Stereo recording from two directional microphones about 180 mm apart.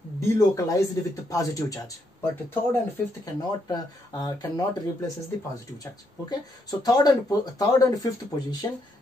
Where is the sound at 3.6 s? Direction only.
20° left (ahead or behind).